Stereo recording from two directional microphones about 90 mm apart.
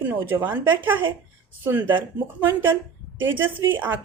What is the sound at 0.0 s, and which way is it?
Speech, 20° right (ahead or behind).